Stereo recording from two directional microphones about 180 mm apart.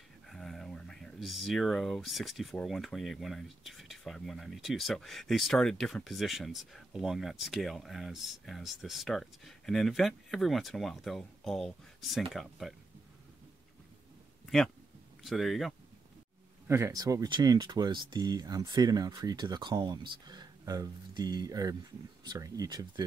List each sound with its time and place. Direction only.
0.3 s speech: centre (ahead or behind)
14.4 s a sound: centre (ahead or behind)
15.2 s speech: centre (ahead or behind)
16.6 s speech: 15° right (ahead or behind)